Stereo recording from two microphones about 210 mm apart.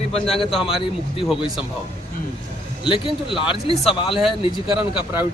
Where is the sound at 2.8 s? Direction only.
25° left (ahead or behind).